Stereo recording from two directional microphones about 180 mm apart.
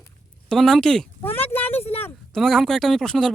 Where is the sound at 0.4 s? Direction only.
Centre (ahead or behind).